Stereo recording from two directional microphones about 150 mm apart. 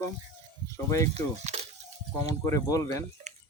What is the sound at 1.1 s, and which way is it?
Speech, 45° right (ahead or behind).